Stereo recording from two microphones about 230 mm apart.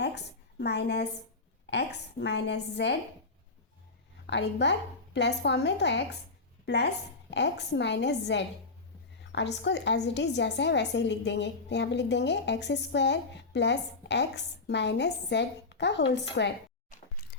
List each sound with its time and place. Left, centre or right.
0.6 s a woman's voice: left
4.3 s a woman's voice: left